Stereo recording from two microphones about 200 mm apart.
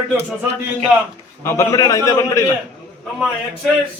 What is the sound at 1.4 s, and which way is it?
A man's voice, 15° left (ahead or behind).